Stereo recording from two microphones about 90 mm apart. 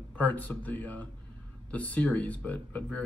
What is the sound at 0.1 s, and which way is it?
Speech, 20° left (ahead or behind).